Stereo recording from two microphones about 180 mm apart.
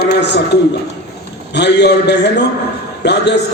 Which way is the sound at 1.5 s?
70° left (ahead or behind).